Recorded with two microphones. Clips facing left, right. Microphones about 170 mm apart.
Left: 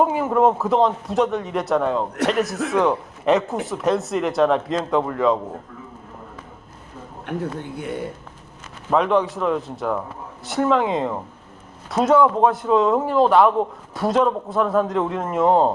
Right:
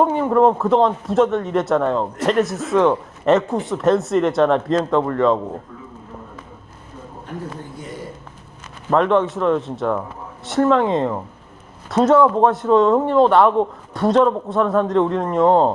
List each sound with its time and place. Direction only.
0.0 s a man's voice: 5° left (ahead or behind)
7.3 s speech: 65° left (ahead or behind)
8.9 s a man's voice: centre (ahead or behind)